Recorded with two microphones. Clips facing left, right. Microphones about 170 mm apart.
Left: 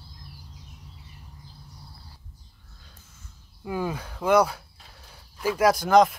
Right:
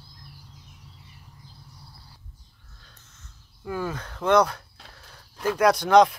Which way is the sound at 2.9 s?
10° left (ahead or behind).